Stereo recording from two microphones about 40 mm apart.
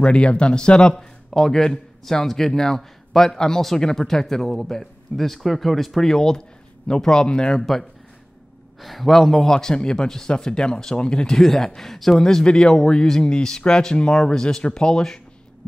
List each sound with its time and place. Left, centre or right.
0.0 s speech: left
0.9 s speech: centre
8.8 s speech: centre
9.5 s speech: centre
11.3 s speech: centre